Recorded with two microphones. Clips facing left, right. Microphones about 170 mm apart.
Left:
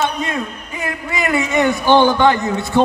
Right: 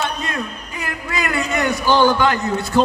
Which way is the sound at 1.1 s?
20° left (ahead or behind).